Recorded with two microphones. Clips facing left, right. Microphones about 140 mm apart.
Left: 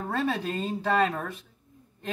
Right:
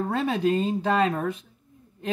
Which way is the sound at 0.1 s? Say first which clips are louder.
Right 4 dB; 20° right (ahead or behind).